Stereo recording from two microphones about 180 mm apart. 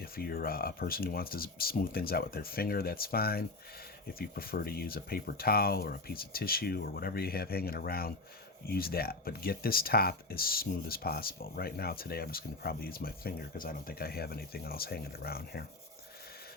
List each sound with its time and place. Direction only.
0.0 s speech: 55° left (ahead or behind)